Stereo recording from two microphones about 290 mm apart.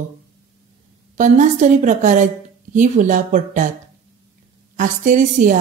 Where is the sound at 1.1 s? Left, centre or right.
Right.